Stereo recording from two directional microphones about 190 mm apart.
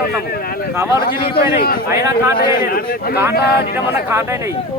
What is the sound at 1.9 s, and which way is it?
Speech, 15° right (ahead or behind).